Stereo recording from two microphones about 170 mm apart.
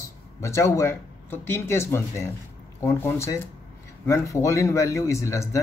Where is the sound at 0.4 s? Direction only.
15° left (ahead or behind).